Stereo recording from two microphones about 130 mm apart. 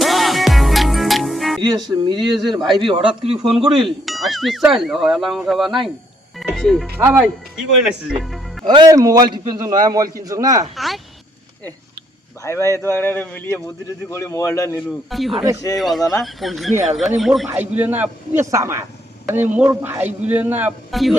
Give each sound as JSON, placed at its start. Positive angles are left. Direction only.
{"t": 0.0, "sound": "music", "side_deg": 0}
{"t": 1.6, "sound": "speech", "side_deg": -30}
{"t": 3.5, "sound": "speech", "side_deg": -5}
{"t": 6.9, "sound": "a man's voice", "side_deg": -15}
{"t": 7.2, "sound": "speech", "side_deg": -5}
{"t": 8.6, "sound": "speech", "side_deg": -35}
{"t": 9.0, "sound": "speech", "side_deg": -25}
{"t": 10.8, "sound": "speech", "side_deg": 0}
{"t": 12.4, "sound": "a man's voice", "side_deg": 20}
{"t": 14.8, "sound": "speech", "side_deg": 0}
{"t": 17.5, "sound": "a man's voice", "side_deg": -15}
{"t": 20.9, "sound": "speech", "side_deg": 0}